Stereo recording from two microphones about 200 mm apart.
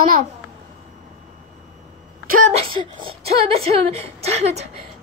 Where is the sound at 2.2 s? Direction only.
40° right (ahead or behind).